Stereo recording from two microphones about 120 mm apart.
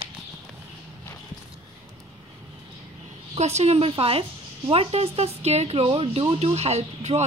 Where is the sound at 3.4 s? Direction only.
65° right (ahead or behind).